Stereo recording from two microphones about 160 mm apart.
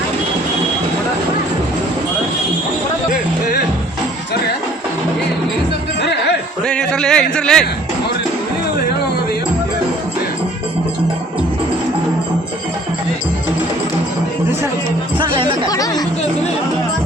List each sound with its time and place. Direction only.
6.7 s a sound: 5° left (ahead or behind)
15.2 s music: 30° right (ahead or behind)
15.7 s chatter: 25° left (ahead or behind)